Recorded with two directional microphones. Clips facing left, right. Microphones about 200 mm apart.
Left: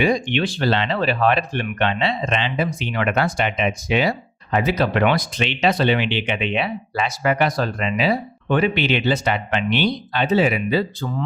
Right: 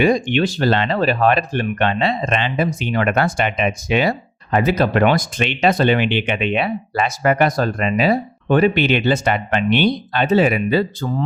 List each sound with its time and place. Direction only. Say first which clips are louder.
0.0 s speech: right 4 dB; 45° right (ahead or behind)